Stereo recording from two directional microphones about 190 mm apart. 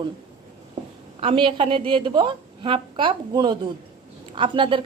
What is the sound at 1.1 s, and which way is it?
A woman's voice, 30° right (ahead or behind).